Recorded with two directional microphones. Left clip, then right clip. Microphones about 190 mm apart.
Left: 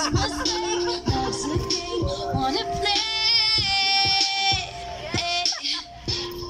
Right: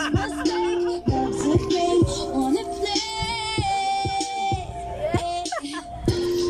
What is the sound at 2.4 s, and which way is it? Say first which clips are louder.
Music: left 4 dB; 55° right (ahead or behind).